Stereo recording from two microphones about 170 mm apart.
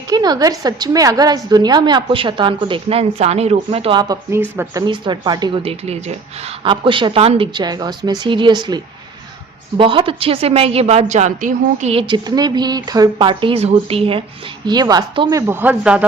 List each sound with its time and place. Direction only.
0.1 s a woman's voice: 25° right (ahead or behind)
4.1 s speech: 15° right (ahead or behind)
4.9 s a woman's voice: 25° right (ahead or behind)
5.8 s a woman's voice: 40° right (ahead or behind)
15.4 s speech: 10° right (ahead or behind)